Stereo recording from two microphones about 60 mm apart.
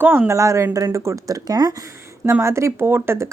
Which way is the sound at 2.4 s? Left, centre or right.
Right.